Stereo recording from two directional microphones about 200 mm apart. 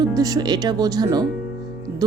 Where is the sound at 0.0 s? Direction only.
20° right (ahead or behind).